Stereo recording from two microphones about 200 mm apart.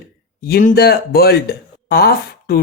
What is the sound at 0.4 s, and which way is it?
A woman's voice, 50° left (ahead or behind).